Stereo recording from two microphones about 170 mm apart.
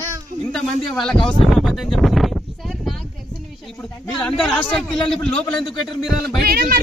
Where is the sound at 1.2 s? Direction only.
Centre (ahead or behind).